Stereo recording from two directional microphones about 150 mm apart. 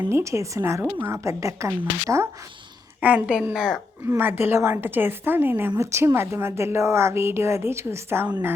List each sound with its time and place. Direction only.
0.0 s a woman's voice: 20° right (ahead or behind); by 3.8 s centre (ahead or behind)
4.0 s a woman's voice: 15° right (ahead or behind)